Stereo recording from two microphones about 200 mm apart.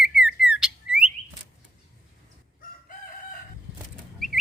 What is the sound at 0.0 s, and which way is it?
Bird, 5° right (ahead or behind).